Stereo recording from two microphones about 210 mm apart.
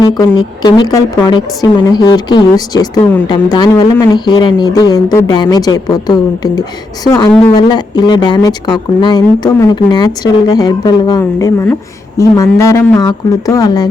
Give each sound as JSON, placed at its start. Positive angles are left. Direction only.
{"t": 0.0, "sound": "a woman's voice", "side_deg": 15}